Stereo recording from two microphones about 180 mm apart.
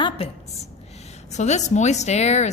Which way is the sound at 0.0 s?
30° left (ahead or behind).